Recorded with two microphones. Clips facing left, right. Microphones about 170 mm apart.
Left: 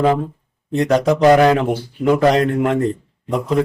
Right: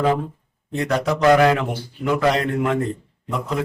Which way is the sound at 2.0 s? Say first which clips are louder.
Left 5 dB; 40° left (ahead or behind).